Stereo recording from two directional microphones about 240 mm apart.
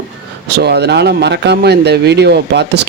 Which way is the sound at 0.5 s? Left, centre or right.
Right.